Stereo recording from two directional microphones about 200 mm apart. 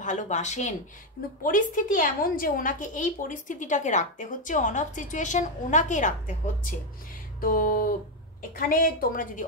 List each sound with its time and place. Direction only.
0.0 s a woman's voice: 40° left (ahead or behind)